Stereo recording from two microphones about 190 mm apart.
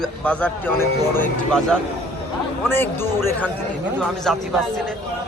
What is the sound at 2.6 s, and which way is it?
A man's voice, 10° left (ahead or behind).